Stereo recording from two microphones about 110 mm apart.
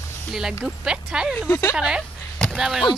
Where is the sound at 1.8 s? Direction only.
5° right (ahead or behind).